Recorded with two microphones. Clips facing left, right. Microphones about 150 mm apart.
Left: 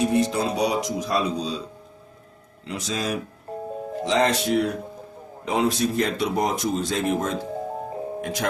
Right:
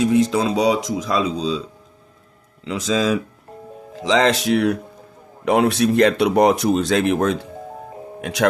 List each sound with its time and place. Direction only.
0.0 s speech: 90° right
2.6 s speech: 90° right
5.5 s speech: 65° right (ahead or behind)